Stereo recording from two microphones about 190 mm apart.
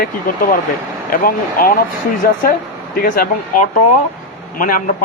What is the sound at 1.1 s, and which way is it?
A man's voice, 50° left (ahead or behind).